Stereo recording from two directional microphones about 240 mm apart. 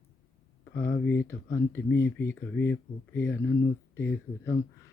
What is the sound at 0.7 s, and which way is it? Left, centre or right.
Speech, left.